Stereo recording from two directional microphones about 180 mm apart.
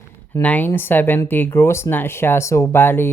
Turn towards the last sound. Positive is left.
turn(degrees=10)  # may be behind; listen again after turning